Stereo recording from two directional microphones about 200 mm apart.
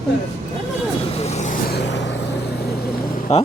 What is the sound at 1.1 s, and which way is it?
Vehicle, 35° left (ahead or behind).